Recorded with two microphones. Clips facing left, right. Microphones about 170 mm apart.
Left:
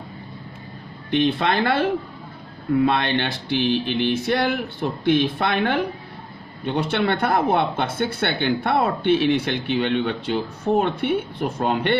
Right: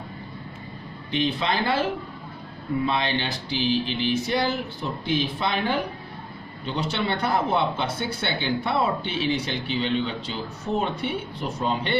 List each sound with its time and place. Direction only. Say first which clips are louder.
1.1 s speech: left 5 dB; 60° left (ahead or behind)
2.8 s speech: left 2 dB; 60° left (ahead or behind)